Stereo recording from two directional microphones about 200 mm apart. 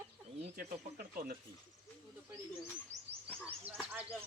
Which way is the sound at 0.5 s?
45° right (ahead or behind).